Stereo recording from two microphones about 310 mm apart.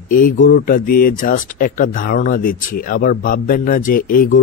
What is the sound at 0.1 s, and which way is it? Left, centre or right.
Speech, left.